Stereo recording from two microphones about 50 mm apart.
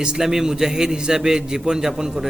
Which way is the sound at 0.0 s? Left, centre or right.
Centre.